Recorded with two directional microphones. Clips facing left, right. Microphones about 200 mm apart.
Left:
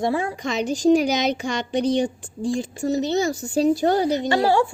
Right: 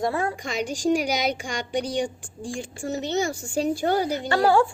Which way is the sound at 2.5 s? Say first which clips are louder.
Left 7 dB; 40° left (ahead or behind).